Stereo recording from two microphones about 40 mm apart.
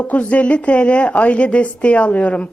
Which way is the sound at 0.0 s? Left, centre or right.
Left.